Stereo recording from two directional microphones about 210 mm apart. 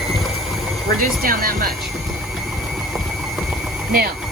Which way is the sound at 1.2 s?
45° right (ahead or behind).